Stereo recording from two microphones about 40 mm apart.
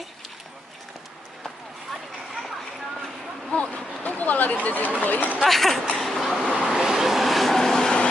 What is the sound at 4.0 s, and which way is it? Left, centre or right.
Speech, left.